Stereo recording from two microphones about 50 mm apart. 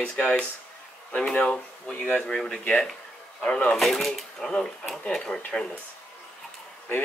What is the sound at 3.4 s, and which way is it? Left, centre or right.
Speech, centre.